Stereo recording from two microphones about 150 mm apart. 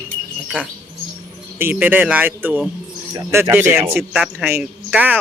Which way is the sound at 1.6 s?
15° right (ahead or behind).